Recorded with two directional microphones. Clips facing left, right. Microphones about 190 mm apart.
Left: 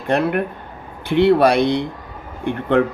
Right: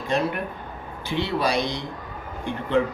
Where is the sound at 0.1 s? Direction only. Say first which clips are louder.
Left 7 dB; 60° left (ahead or behind).